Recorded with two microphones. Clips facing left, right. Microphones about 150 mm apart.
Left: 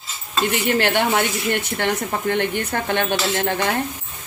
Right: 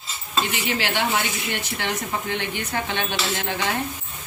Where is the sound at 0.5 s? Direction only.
55° left (ahead or behind).